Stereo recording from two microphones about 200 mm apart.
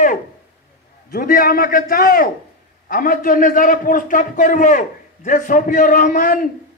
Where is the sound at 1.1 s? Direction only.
45° left (ahead or behind).